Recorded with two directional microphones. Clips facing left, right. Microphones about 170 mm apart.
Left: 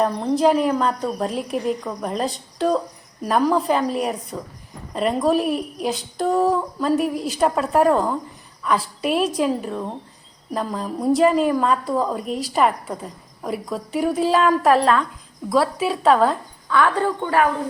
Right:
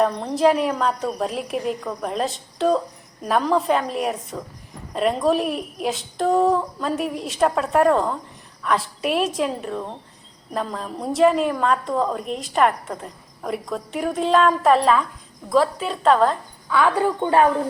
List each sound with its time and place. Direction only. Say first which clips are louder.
0.0 s a woman's voice: even; centre (ahead or behind)
16.6 s speech: even; 15° right (ahead or behind)
17.2 s speech: right 3 dB; 25° right (ahead or behind)